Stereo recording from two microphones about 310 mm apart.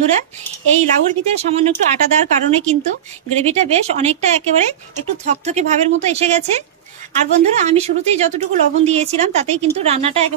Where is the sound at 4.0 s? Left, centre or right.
Right.